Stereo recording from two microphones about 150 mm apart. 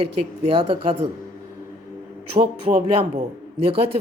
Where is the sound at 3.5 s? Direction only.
40° right (ahead or behind).